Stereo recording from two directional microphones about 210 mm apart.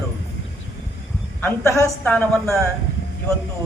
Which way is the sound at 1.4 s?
10° left (ahead or behind).